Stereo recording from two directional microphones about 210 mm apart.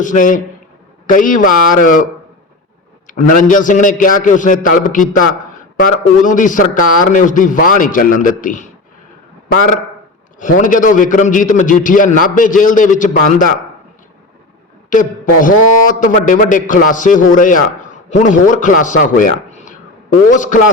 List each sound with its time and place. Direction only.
0.0 s a man's voice: 40° left (ahead or behind)
3.1 s a man's voice: 40° left (ahead or behind)
10.4 s a man's voice: 40° left (ahead or behind)
14.8 s a man's voice: 40° left (ahead or behind)